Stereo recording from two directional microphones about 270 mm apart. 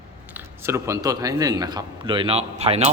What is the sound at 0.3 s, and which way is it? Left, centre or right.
A man's voice, centre.